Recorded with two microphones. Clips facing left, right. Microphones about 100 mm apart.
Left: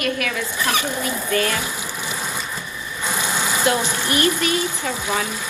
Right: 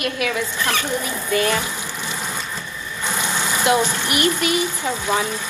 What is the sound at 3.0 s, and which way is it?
Vehicle, 15° left (ahead or behind).